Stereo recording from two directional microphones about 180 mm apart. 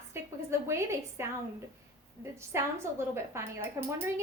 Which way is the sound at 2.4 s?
15° right (ahead or behind).